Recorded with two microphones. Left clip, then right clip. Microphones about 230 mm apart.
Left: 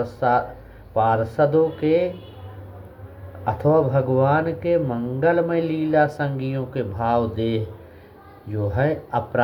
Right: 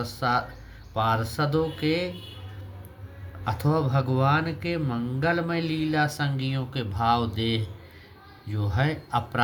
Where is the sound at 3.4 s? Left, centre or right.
Right.